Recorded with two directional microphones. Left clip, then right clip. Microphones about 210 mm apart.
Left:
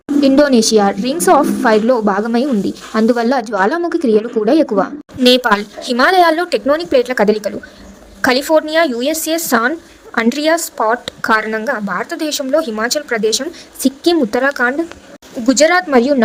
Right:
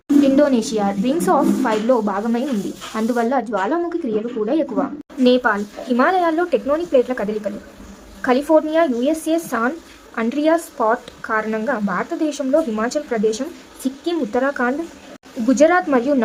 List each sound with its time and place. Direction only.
0.2 s a woman's voice: 25° left (ahead or behind)